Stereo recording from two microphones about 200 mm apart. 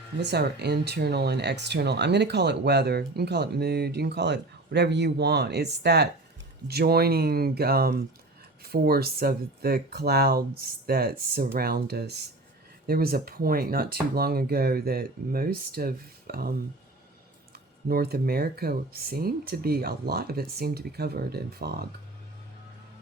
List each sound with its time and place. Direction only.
0.2 s speech: 55° right (ahead or behind)
17.8 s speech: 50° right (ahead or behind)